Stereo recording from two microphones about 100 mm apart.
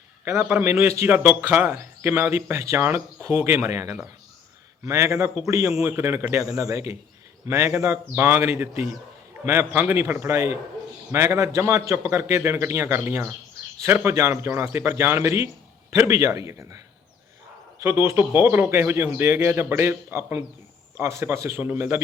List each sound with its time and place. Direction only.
0.4 s speech: 20° right (ahead or behind)